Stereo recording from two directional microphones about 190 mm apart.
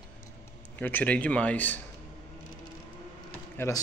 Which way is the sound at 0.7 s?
10° left (ahead or behind).